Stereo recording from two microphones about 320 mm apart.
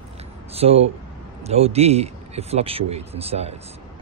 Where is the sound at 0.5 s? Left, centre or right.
Centre.